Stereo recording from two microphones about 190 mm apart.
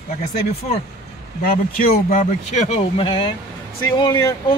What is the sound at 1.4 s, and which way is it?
Speech, 50° left (ahead or behind).